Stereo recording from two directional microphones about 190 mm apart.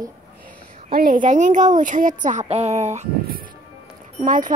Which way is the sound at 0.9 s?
50° right (ahead or behind).